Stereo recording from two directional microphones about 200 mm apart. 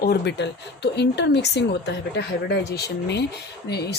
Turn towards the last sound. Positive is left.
turn(degrees=55)  # may be behind; listen again after turning